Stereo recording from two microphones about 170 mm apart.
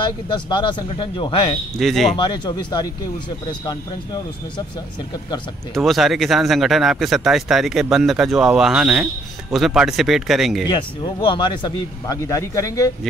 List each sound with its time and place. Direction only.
0.0 s speech: 25° left (ahead or behind)
1.8 s speech: centre (ahead or behind)
2.1 s speech: 25° left (ahead or behind)
5.8 s speech: centre (ahead or behind)
10.7 s speech: 25° left (ahead or behind)